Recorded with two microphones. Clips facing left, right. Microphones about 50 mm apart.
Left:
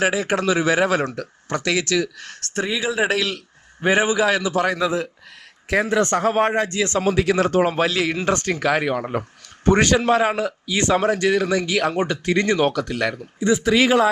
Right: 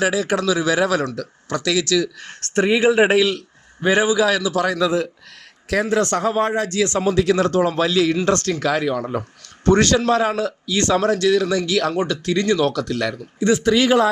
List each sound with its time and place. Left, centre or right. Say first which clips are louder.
0.0 s speech: right 1 dB; centre
2.4 s speech: right 7 dB; right
3.2 s a man's voice: right 6 dB; centre
3.8 s a man's voice: right 1 dB; centre
7.1 s speech: right 1 dB; centre
7.5 s speech: even; left
7.9 s speech: right 3 dB; centre